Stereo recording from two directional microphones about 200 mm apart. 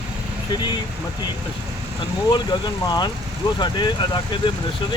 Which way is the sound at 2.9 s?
20° left (ahead or behind).